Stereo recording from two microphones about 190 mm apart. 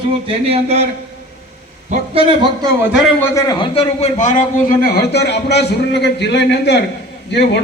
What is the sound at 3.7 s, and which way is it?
A man's voice, 35° left (ahead or behind).